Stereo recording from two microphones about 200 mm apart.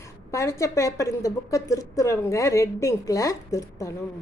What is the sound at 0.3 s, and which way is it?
A woman's voice, 15° left (ahead or behind).